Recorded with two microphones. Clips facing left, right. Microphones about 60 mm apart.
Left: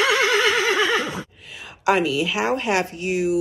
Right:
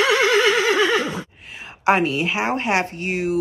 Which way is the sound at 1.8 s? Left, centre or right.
Right.